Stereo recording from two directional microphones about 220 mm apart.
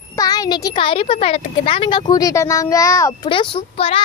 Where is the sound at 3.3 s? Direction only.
25° left (ahead or behind).